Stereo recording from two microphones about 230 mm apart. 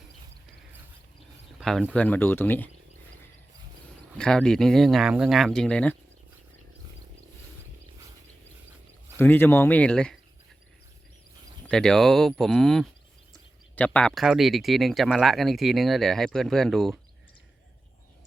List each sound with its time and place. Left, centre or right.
1.5 s speech: centre
4.2 s speech: centre
9.1 s speech: centre
11.7 s speech: centre